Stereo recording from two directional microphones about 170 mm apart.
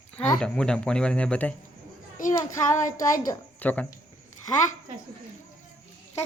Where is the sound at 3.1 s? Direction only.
20° left (ahead or behind).